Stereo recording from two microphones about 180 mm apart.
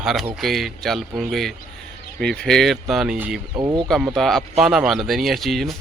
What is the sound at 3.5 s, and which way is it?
Speech, 25° right (ahead or behind).